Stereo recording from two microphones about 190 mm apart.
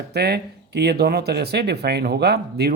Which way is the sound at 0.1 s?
60° right (ahead or behind).